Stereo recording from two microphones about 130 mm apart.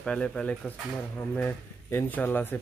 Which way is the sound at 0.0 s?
5° left (ahead or behind).